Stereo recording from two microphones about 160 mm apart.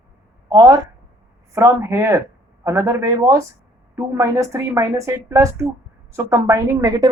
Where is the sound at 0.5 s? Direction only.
20° right (ahead or behind).